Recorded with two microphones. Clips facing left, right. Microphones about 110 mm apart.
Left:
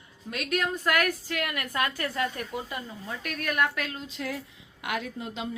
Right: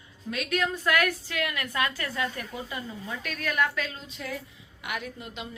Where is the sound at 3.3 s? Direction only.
50° left (ahead or behind).